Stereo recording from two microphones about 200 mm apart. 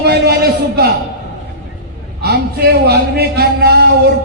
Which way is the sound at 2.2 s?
55° right (ahead or behind).